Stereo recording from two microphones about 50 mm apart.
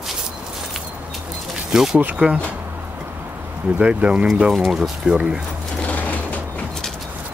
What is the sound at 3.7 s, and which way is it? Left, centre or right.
Speech, right.